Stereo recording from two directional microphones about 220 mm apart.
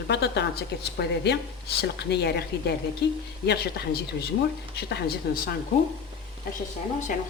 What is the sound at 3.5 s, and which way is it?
Speech, 45° left (ahead or behind).